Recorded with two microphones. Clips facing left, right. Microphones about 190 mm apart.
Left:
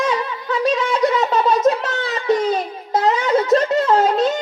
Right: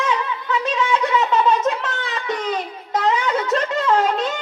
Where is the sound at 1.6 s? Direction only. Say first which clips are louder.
Left 5 dB; 35° left (ahead or behind).